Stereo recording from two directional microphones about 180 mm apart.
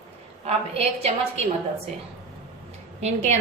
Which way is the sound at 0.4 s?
35° right (ahead or behind).